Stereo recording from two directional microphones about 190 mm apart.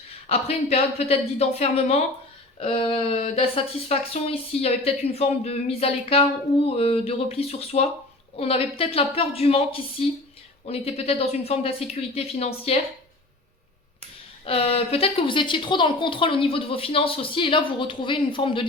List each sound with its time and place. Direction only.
0.3 s a woman's voice: 35° left (ahead or behind)
14.4 s a woman's voice: 30° left (ahead or behind)